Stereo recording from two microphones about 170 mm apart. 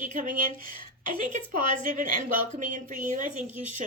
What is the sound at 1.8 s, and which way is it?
Speech, 45° right (ahead or behind).